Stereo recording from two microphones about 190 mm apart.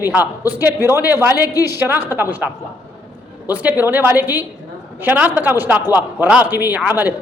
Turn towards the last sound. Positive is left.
turn(degrees=-10)  # may be behind; listen again after turning